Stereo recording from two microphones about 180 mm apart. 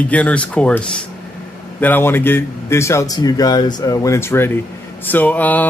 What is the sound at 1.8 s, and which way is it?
Speech, 10° left (ahead or behind).